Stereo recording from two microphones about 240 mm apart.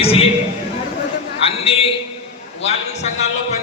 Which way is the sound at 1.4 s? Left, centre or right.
Left.